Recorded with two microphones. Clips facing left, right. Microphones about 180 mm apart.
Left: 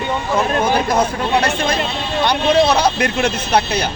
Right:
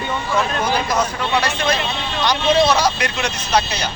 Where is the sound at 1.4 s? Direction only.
50° left (ahead or behind).